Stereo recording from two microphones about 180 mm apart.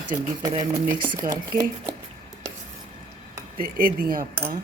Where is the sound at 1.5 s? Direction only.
55° right (ahead or behind).